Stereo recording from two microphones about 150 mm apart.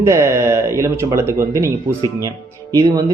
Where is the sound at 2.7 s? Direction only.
25° right (ahead or behind).